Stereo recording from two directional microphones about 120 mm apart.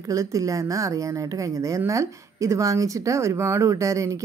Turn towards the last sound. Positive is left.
turn(degrees=-25)  # may be behind; listen again after turning